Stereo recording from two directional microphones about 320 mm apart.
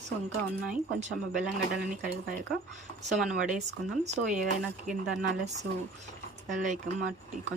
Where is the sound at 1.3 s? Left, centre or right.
Centre.